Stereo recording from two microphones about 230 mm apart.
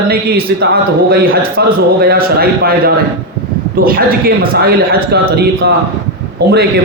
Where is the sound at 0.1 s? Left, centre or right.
Right.